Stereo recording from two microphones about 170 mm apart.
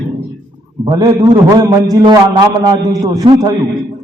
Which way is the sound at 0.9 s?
20° right (ahead or behind).